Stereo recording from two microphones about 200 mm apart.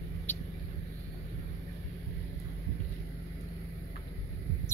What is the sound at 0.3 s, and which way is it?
Vehicle, 10° left (ahead or behind).